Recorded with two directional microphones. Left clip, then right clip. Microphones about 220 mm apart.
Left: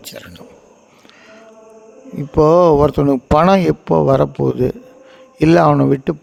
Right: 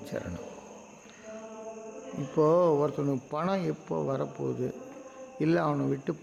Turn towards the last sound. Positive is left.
turn(degrees=45)  # may be behind; listen again after turning